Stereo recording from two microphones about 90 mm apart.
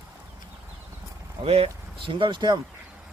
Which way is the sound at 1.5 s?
80° right.